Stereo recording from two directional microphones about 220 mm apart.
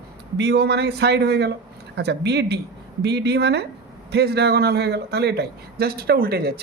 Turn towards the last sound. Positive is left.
turn(degrees=-45)  # may be behind; listen again after turning